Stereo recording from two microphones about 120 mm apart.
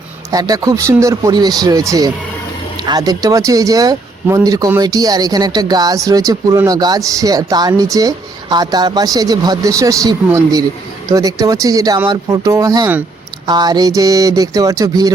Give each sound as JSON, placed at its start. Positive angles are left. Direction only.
{"t": 0.3, "sound": "speech", "side_deg": -30}